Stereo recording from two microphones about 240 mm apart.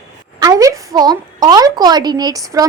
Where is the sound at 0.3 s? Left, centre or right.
Centre.